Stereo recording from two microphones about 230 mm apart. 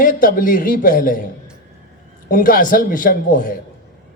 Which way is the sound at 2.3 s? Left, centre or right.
Left.